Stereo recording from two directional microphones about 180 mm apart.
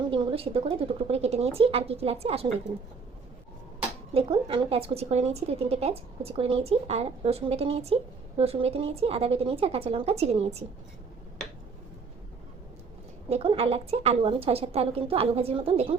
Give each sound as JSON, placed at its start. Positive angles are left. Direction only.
{"t": 0.1, "sound": "a woman's voice", "side_deg": -30}
{"t": 4.1, "sound": "a woman's voice", "side_deg": -30}
{"t": 13.3, "sound": "a woman's voice", "side_deg": -30}